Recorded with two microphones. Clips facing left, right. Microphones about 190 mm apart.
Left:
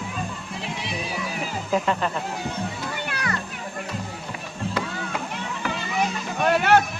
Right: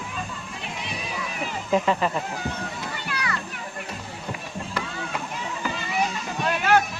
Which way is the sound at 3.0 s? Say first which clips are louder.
Even; 50° left (ahead or behind).